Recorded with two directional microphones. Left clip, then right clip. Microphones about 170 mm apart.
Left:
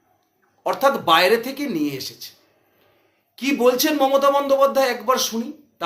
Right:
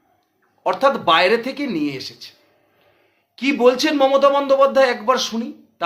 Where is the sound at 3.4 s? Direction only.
15° right (ahead or behind).